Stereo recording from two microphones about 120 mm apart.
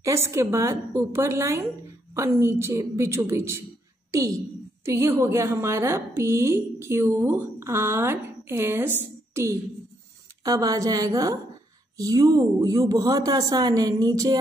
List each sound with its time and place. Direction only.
0.0 s a woman's voice: 25° right (ahead or behind)